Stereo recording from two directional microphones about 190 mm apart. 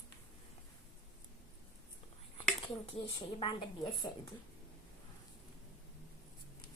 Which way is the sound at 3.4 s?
25° left (ahead or behind).